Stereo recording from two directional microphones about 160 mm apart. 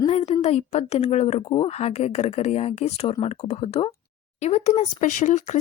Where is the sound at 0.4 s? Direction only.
45° left (ahead or behind).